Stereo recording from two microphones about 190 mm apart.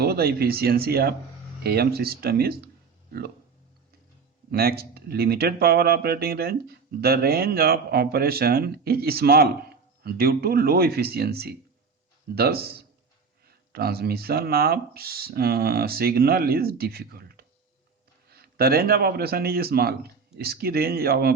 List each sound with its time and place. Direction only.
0.0 s speech: 55° right (ahead or behind)
4.5 s speech: 55° right (ahead or behind)